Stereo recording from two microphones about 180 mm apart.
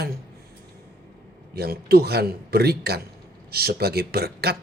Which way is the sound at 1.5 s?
60° right (ahead or behind).